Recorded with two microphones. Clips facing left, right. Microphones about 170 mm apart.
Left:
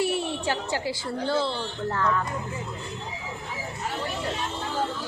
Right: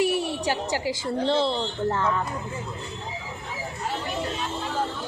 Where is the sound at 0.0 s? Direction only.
10° right (ahead or behind).